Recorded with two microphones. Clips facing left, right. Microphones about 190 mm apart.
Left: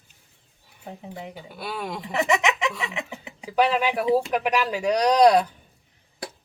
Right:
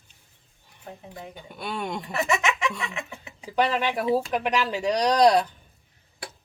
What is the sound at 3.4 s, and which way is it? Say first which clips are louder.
Speech: left 2 dB; 10° left (ahead or behind).